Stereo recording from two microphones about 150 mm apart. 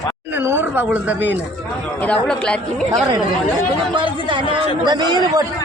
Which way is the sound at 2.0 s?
5° left (ahead or behind).